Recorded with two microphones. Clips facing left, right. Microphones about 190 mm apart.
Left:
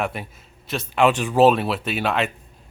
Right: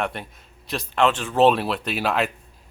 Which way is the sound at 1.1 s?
15° left (ahead or behind).